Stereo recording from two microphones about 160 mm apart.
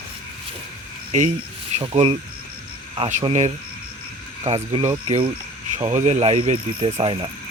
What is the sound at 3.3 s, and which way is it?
Speech, 45° right (ahead or behind).